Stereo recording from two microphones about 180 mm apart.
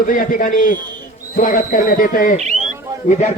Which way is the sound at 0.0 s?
50° left (ahead or behind).